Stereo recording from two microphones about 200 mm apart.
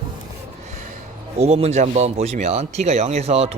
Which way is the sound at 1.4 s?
30° right (ahead or behind).